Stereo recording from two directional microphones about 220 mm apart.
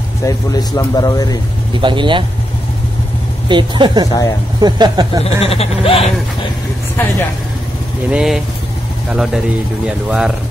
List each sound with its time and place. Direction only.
0.2 s speech: 15° left (ahead or behind)
1.8 s speech: 20° right (ahead or behind)
3.4 s speech: 20° right (ahead or behind)
5.2 s speech: 25° left (ahead or behind)
7.0 s speech: 10° left (ahead or behind)
8.1 s speech: 5° right (ahead or behind)